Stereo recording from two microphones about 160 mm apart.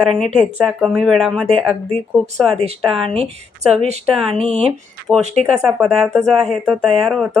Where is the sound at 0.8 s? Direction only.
Centre (ahead or behind).